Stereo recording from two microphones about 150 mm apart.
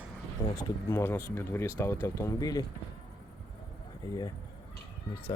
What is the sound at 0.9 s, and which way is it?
Speech, 15° left (ahead or behind).